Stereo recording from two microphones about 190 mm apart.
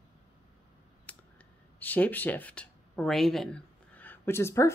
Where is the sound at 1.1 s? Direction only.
5° left (ahead or behind).